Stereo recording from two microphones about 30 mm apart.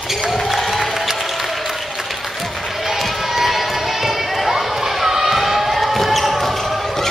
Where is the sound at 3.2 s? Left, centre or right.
Centre.